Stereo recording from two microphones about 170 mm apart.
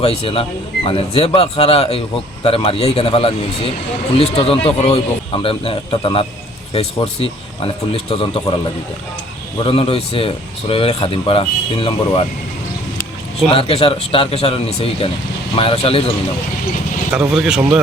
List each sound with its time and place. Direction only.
0.0 s speech: 35° left (ahead or behind)
9.6 s speech: 35° left (ahead or behind)
13.5 s speech: 35° left (ahead or behind)
17.1 s speech: 5° right (ahead or behind)